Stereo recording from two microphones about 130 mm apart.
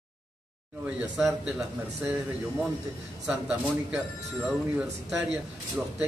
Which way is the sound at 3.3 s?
10° right (ahead or behind).